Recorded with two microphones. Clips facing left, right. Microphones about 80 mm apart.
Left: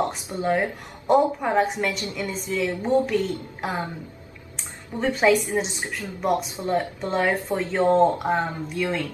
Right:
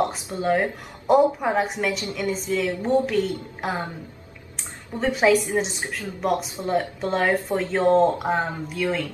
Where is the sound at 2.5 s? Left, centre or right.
Centre.